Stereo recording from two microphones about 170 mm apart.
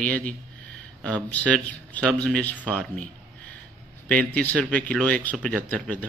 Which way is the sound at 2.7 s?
5° left (ahead or behind).